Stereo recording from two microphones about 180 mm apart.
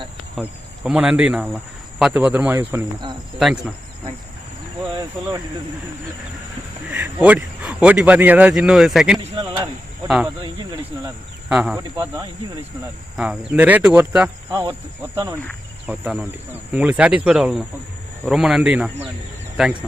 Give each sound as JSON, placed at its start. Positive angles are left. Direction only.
{"t": 0.4, "sound": "speech", "side_deg": 0}
{"t": 3.3, "sound": "speech", "side_deg": 0}
{"t": 6.9, "sound": "speech", "side_deg": -10}
{"t": 9.3, "sound": "a sound", "side_deg": -25}
{"t": 10.4, "sound": "cricket", "side_deg": -20}
{"t": 11.4, "sound": "speech", "side_deg": -5}
{"t": 11.9, "sound": "speech", "side_deg": -15}
{"t": 14.5, "sound": "speech", "side_deg": -20}
{"t": 15.9, "sound": "speech", "side_deg": 0}